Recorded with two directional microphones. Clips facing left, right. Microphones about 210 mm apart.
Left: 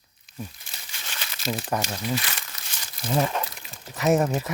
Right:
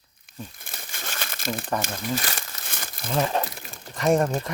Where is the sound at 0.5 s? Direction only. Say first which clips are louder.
Right 5 dB; 55° right (ahead or behind).